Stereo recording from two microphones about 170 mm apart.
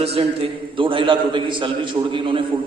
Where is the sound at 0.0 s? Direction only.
35° right (ahead or behind).